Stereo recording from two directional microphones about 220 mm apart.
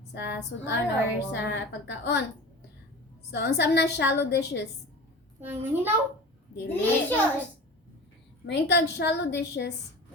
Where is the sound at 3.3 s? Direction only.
50° left (ahead or behind).